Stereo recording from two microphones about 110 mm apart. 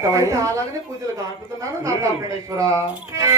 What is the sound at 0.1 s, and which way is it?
Music, 30° right (ahead or behind).